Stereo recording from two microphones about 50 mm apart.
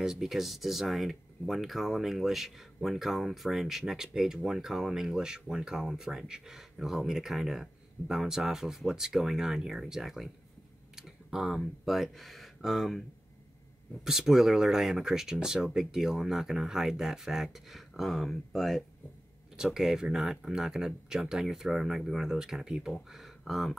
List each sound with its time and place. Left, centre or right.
0.0 s speech: centre
14.0 s speech: centre
19.5 s speech: centre